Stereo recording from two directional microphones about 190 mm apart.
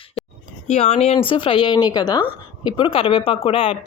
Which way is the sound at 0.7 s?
35° left (ahead or behind).